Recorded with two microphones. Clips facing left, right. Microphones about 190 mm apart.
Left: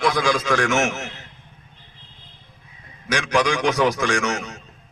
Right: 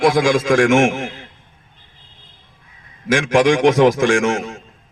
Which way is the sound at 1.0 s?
50° right (ahead or behind).